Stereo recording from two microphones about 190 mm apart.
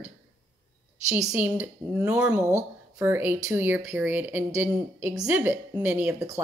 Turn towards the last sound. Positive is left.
turn(degrees=-10)  # may be behind; listen again after turning